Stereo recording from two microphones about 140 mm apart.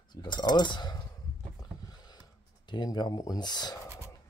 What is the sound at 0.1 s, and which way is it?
Speech, 30° left (ahead or behind).